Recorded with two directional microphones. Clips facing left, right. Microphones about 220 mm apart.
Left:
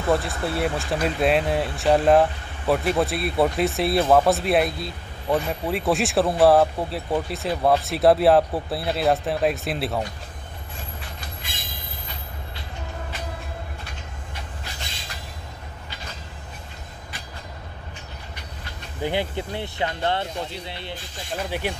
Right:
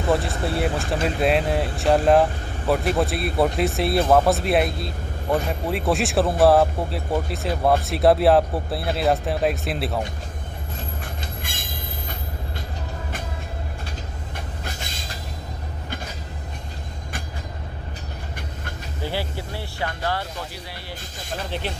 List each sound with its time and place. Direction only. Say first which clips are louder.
0.1 s speech: even; centre (ahead or behind)
11.4 s train: right 4 dB; 50° right (ahead or behind)
19.0 s speech: left 3 dB; 20° left (ahead or behind)
21.5 s speech: left 2 dB; 10° left (ahead or behind)